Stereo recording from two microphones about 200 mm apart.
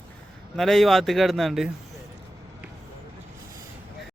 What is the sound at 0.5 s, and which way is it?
A man's voice, centre (ahead or behind).